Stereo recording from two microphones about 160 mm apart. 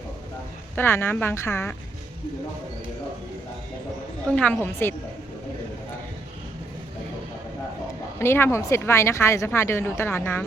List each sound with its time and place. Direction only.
0.8 s speech: 15° left (ahead or behind)
4.3 s speech: 5° left (ahead or behind)
8.2 s speech: 15° left (ahead or behind)